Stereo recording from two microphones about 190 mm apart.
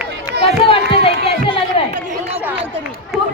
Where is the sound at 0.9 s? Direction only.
30° left (ahead or behind).